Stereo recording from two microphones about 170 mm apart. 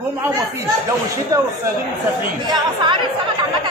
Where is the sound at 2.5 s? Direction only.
30° right (ahead or behind).